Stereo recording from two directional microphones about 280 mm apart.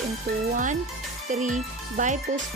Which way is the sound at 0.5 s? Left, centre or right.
Right.